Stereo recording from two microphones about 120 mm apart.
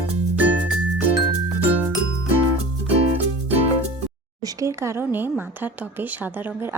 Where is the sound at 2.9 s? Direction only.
55° right (ahead or behind).